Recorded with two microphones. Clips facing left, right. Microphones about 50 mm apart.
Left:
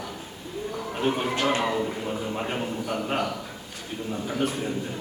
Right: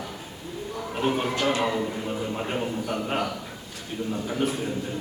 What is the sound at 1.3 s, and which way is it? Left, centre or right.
Speech, left.